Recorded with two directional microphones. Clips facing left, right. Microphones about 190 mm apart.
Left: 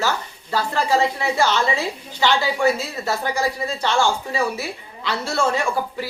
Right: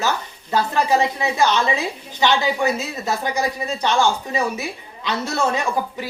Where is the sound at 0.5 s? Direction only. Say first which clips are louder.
Right 2 dB; 20° right (ahead or behind).